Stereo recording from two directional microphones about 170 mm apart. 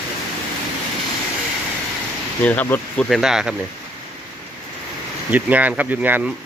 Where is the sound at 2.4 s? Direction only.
10° left (ahead or behind).